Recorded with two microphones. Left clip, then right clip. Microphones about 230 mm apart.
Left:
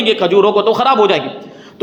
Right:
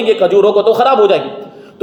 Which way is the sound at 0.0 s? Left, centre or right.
Left.